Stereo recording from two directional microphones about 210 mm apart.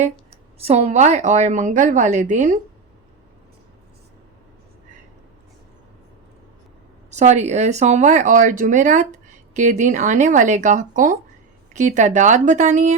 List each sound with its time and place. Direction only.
0.0 s speech: 30° right (ahead or behind)
7.1 s speech: 35° right (ahead or behind)